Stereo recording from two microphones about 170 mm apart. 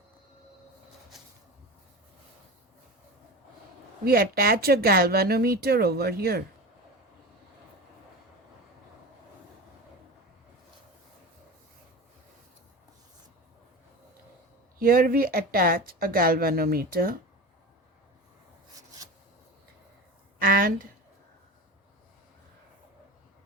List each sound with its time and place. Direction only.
4.0 s speech: 65° right (ahead or behind)
14.8 s speech: 60° right (ahead or behind)
20.4 s speech: 55° right (ahead or behind)